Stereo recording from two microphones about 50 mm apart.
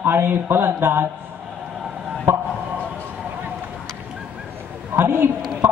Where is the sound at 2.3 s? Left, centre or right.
Right.